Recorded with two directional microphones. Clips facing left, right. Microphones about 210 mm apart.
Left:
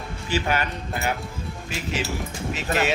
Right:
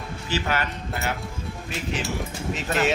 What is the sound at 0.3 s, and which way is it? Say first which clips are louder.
Speech: left 2 dB; 15° left (ahead or behind).